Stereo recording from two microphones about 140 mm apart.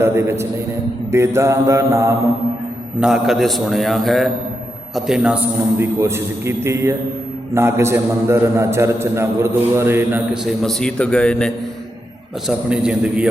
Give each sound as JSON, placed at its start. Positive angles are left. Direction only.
{"t": 0.0, "sound": "a man's voice", "side_deg": -20}
{"t": 3.0, "sound": "a man's voice", "side_deg": 0}
{"t": 10.4, "sound": "a man's voice", "side_deg": 0}
{"t": 12.5, "sound": "a man's voice", "side_deg": -5}